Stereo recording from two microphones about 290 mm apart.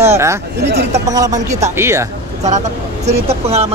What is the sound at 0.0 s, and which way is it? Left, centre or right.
Speech, centre.